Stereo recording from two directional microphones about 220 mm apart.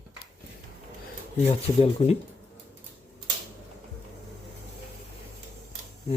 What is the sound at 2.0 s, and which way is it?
Speech, 25° left (ahead or behind).